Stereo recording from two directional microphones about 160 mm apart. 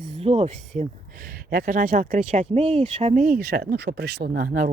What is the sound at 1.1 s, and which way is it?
Speech, 65° right (ahead or behind).